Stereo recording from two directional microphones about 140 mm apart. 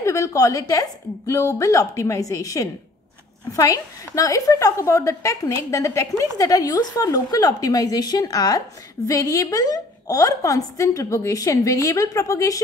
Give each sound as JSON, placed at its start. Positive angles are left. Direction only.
{"t": 0.0, "sound": "a woman's voice", "side_deg": 20}